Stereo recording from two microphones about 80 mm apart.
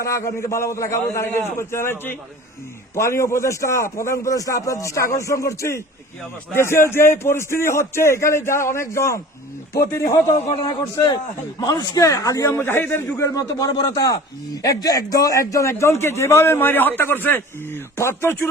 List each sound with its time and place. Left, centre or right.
0.0 s a man's voice: left
11.6 s a man's voice: left
12.5 s a man's voice: left
13.3 s speech: left
13.8 s a man's voice: left